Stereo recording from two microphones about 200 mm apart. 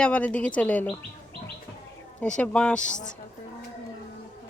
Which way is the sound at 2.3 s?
5° left (ahead or behind).